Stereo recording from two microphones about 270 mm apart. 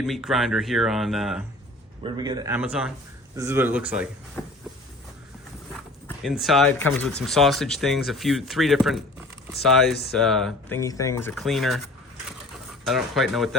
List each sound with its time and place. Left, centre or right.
0.0 s speech: centre
2.0 s speech: centre
4.4 s a sound: centre
6.4 s speech: centre
12.8 s speech: centre